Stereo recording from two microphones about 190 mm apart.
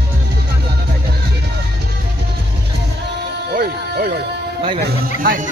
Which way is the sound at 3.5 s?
50° right (ahead or behind).